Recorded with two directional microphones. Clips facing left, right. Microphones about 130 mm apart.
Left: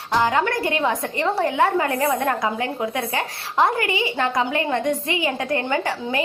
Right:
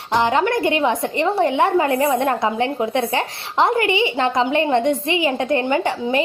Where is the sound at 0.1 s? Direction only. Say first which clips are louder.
Right 3 dB; 20° right (ahead or behind).